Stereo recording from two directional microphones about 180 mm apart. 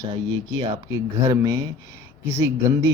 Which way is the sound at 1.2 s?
20° right (ahead or behind).